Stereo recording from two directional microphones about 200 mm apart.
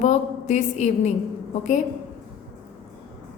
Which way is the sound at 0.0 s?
35° left (ahead or behind).